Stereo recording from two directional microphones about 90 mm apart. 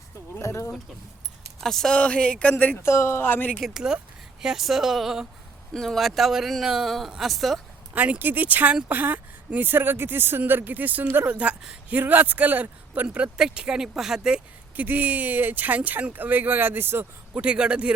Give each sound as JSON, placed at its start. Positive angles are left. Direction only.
{"t": 0.3, "sound": "speech", "side_deg": 35}
{"t": 1.6, "sound": "speech", "side_deg": 5}
{"t": 2.8, "sound": "speech", "side_deg": 30}
{"t": 3.6, "sound": "a man's voice", "side_deg": -5}
{"t": 7.9, "sound": "speech", "side_deg": -15}
{"t": 17.4, "sound": "speech", "side_deg": -10}